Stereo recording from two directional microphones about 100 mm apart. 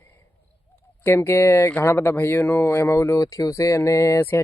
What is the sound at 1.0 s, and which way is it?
Speech, 25° left (ahead or behind).